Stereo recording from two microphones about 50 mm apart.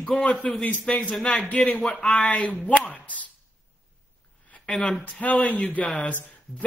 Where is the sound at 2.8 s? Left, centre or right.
Left.